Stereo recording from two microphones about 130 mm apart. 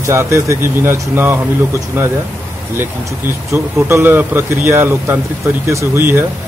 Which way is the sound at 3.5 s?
20° right (ahead or behind).